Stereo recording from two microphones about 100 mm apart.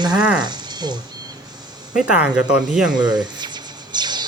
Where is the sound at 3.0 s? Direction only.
45° right (ahead or behind).